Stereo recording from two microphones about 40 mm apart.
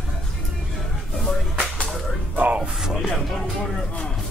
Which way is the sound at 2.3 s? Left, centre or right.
Right.